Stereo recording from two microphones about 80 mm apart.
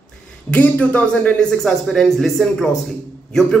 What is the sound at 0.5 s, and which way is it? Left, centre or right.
Speech, centre.